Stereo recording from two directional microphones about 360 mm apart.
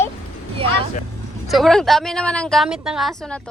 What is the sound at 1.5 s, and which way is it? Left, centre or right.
A woman's voice, centre.